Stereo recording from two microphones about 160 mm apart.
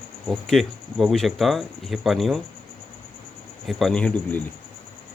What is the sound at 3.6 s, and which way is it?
Speech, centre (ahead or behind).